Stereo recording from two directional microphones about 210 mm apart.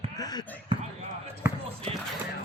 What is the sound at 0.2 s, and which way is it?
Speech, 20° left (ahead or behind).